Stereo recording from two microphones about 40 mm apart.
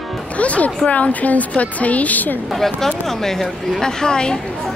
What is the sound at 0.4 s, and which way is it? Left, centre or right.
A woman's voice, left.